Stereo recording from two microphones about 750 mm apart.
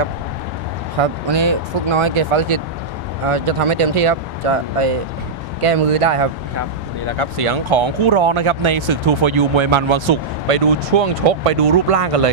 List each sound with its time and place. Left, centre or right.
1.0 s speech: right